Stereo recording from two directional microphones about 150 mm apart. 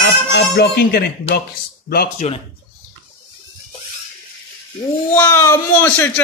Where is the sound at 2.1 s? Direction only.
45° left (ahead or behind).